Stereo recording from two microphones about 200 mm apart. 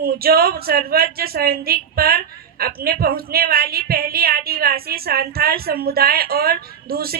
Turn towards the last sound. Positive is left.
turn(degrees=-50)  # may be behind; listen again after turning